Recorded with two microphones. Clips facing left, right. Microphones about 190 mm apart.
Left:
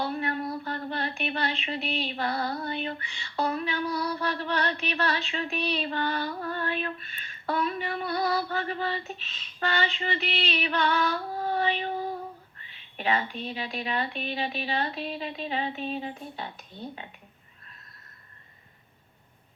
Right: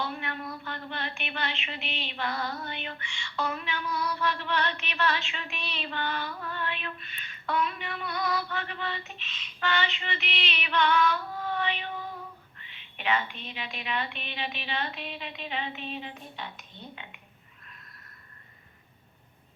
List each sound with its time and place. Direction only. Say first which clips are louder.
0.0 s speech: left 5 dB; 35° left (ahead or behind)